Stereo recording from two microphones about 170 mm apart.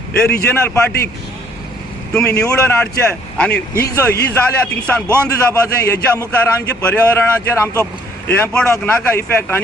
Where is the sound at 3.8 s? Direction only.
20° left (ahead or behind).